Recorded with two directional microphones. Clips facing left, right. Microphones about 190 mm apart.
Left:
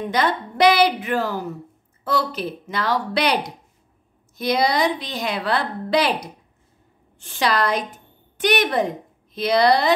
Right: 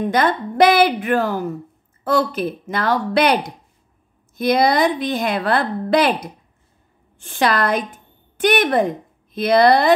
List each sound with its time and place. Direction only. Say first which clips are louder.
0.1 s a woman's voice: right 3 dB; 50° right (ahead or behind)